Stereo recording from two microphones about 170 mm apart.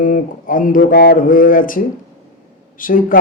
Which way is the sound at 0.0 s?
55° left (ahead or behind).